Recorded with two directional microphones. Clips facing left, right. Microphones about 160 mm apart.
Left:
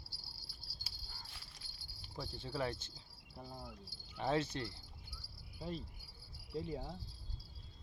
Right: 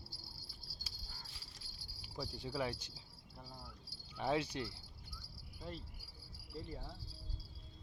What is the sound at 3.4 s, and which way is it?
Speech, 15° left (ahead or behind).